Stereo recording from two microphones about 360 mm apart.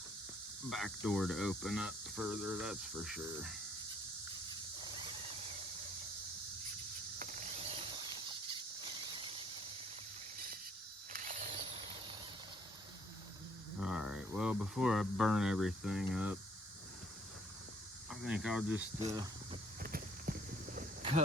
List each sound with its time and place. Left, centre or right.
0.7 s speech: centre
7.2 s vehicle: right
9.1 s a sound: centre
11.1 s mechanisms: right
13.7 s speech: centre
18.1 s speech: centre
18.9 s speech: centre
19.8 s walk: right